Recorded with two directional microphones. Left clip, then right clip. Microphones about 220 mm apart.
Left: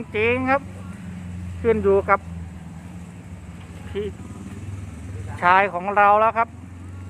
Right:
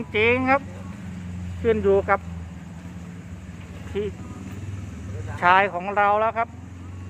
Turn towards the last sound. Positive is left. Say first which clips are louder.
# left 4 dB
turn(degrees=25)  # may be behind; listen again after turning